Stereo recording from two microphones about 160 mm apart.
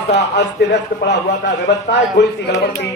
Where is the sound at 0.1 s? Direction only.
90° left.